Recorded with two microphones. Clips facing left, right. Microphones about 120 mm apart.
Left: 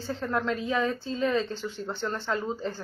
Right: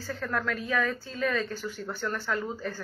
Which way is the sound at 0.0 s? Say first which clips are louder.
Left 2 dB; 25° left (ahead or behind).